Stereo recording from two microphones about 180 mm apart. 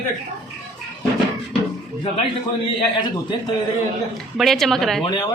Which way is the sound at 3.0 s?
25° left (ahead or behind).